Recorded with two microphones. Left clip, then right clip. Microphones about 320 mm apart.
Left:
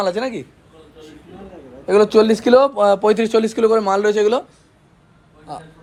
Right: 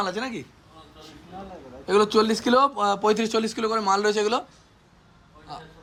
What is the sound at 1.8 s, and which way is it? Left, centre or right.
Speech, centre.